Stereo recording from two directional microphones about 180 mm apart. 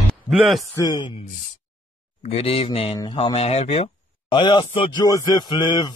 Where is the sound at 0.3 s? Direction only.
Centre (ahead or behind).